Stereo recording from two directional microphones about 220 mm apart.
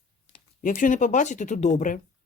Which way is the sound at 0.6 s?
35° left (ahead or behind).